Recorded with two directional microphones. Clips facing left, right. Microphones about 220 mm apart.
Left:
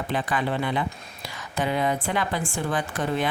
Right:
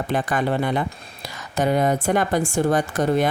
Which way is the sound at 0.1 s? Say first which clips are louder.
Right 4 dB; 45° right (ahead or behind).